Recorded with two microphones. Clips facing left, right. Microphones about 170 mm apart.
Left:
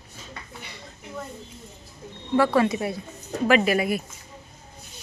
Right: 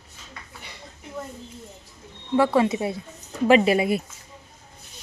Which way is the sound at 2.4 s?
20° right (ahead or behind).